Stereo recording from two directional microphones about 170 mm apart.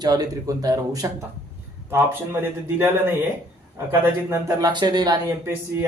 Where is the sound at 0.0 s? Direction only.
20° right (ahead or behind).